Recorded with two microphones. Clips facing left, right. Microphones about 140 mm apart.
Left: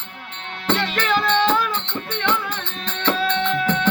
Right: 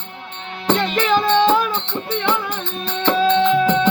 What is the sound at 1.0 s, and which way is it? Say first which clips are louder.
Music: right 5 dB; 10° right (ahead or behind).